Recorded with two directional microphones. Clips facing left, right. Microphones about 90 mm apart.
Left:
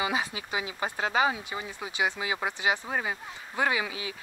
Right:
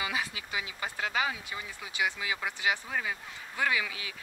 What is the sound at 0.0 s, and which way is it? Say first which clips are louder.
Speech: left 4 dB; 25° left (ahead or behind).